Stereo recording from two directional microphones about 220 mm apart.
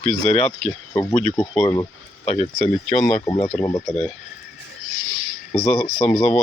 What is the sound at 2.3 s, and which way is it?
Speech, 30° left (ahead or behind).